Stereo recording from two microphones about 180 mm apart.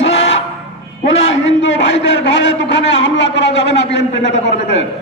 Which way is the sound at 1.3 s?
90° left.